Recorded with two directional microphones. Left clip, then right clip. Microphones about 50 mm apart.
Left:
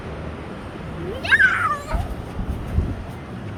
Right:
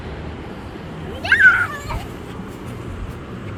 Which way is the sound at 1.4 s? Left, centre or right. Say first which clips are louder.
Right 4 dB; left.